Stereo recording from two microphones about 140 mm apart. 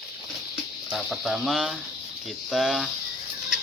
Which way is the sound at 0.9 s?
Centre (ahead or behind).